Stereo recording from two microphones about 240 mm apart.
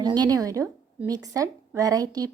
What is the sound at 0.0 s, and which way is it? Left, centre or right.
A woman's voice, centre.